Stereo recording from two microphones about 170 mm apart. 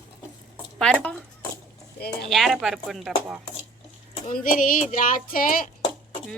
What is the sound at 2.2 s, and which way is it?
Speech, centre (ahead or behind).